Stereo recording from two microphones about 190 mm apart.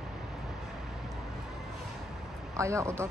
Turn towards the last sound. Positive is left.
turn(degrees=-15)  # may be behind; listen again after turning